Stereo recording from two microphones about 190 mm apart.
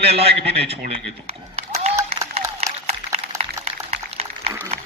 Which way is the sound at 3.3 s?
35° right (ahead or behind).